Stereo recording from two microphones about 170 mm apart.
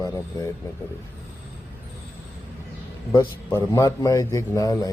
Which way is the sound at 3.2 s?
20° left (ahead or behind).